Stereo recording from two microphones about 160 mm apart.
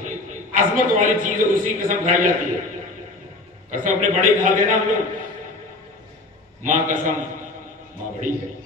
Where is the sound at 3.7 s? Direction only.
55° right (ahead or behind).